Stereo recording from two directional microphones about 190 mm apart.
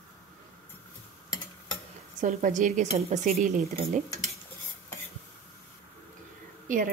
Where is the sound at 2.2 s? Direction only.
40° right (ahead or behind).